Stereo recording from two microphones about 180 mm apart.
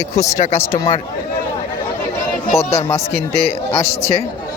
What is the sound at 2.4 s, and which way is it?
Speech, 35° left (ahead or behind).